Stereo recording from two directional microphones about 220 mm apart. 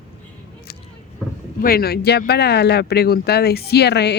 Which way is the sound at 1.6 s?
40° left (ahead or behind).